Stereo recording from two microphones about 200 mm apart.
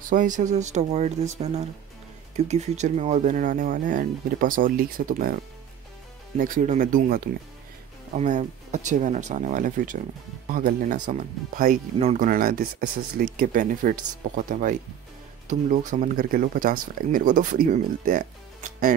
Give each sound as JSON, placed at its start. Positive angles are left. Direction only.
{"t": 0.1, "sound": "speech", "side_deg": -40}